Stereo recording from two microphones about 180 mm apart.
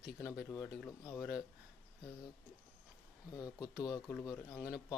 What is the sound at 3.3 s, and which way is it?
Speech, 20° left (ahead or behind).